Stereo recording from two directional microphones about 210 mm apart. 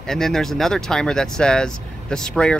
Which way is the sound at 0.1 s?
Centre (ahead or behind).